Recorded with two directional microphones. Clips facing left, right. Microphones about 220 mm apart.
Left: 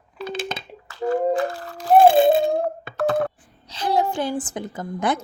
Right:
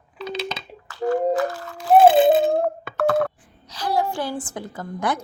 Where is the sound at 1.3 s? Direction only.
35° left (ahead or behind).